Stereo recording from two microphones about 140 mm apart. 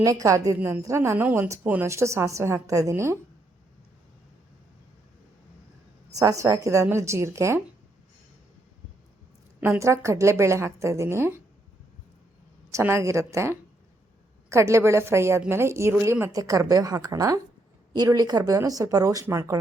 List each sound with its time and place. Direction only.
0.0 s a woman's voice: 25° right (ahead or behind)
6.1 s a woman's voice: 25° right (ahead or behind)
9.6 s a woman's voice: 15° right (ahead or behind)
12.7 s a woman's voice: 20° right (ahead or behind)